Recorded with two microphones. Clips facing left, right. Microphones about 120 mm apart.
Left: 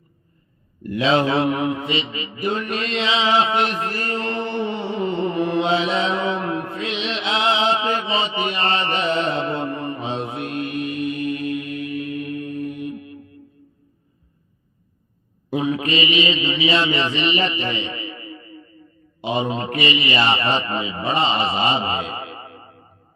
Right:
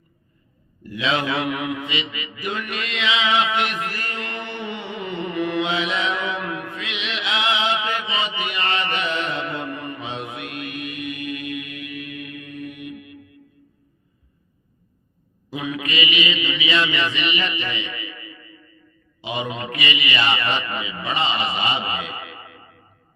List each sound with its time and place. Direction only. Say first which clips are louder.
0.8 s speech: left 8 dB; 55° left (ahead or behind)
1.0 s mantra: left 5 dB; 30° left (ahead or behind)
15.5 s mantra: left 5 dB; 30° left (ahead or behind)
19.2 s a man's voice: left 5 dB; 35° left (ahead or behind)